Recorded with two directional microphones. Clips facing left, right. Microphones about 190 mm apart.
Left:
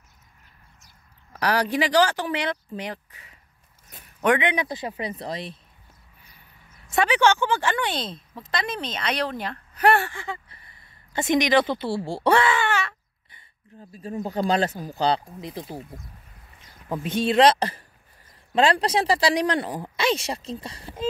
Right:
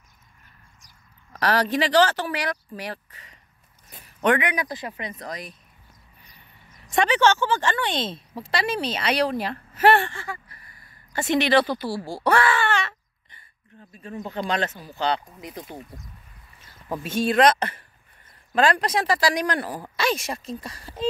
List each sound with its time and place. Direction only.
1.3 s speech: 10° left (ahead or behind)
3.9 s a sound: 10° left (ahead or behind)
4.4 s speech: 25° left (ahead or behind)
6.9 s speech: 10° left (ahead or behind)
8.4 s speech: 10° right (ahead or behind)
10.1 s speech: 20° left (ahead or behind)
13.9 s speech: 35° left (ahead or behind)
16.9 s speech: 20° left (ahead or behind)